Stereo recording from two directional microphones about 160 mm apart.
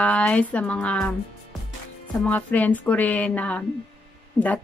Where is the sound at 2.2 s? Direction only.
10° left (ahead or behind).